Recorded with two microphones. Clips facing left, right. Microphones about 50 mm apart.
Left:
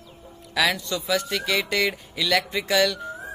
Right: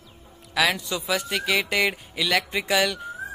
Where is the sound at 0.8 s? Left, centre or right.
Centre.